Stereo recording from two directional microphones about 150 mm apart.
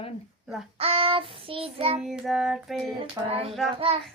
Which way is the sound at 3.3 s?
40° right (ahead or behind).